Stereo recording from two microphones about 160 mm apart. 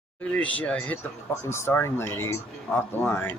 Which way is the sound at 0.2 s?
10° left (ahead or behind).